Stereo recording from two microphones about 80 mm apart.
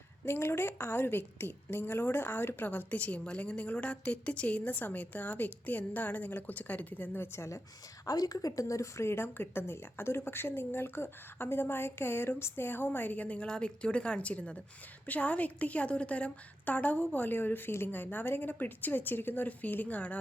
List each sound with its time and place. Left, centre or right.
0.3 s a woman's voice: left
8.0 s a woman's voice: left; by 20.1 s centre